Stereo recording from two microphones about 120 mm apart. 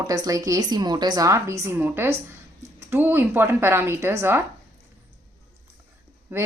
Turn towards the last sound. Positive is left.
turn(degrees=-15)  # may be behind; listen again after turning